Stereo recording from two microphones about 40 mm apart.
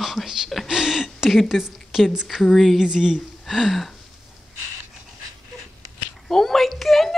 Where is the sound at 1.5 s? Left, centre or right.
Centre.